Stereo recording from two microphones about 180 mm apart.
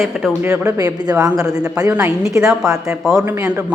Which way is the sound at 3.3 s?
15° right (ahead or behind).